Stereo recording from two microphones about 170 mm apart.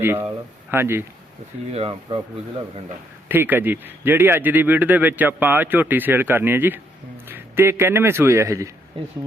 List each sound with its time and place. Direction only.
0.0 s a man's voice: 15° right (ahead or behind)
1.7 s speech: 35° right (ahead or behind)
3.2 s a man's voice: 10° right (ahead or behind)